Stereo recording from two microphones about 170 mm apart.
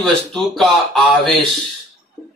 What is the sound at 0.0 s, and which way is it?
Speech, centre (ahead or behind).